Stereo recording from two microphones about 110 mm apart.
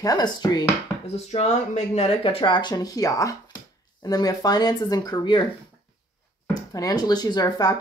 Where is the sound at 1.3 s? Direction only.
70° left (ahead or behind).